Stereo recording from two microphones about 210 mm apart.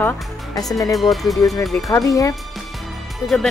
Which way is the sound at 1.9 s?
15° left (ahead or behind).